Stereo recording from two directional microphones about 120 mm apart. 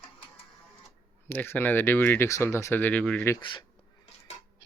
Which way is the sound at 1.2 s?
20° left (ahead or behind).